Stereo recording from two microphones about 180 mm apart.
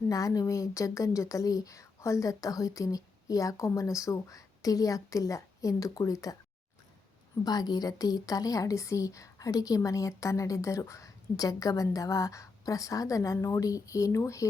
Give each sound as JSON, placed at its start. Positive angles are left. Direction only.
{"t": 0.1, "sound": "a woman's voice", "side_deg": 20}
{"t": 7.4, "sound": "a woman's voice", "side_deg": 20}